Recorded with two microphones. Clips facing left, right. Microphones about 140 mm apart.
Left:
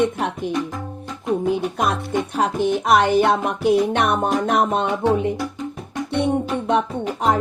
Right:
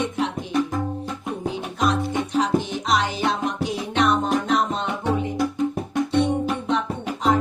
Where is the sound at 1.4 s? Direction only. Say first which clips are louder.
Right 1 dB; 55° left (ahead or behind).